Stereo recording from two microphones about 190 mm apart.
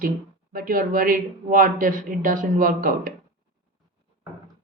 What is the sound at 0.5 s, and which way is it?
Speech, 45° right (ahead or behind).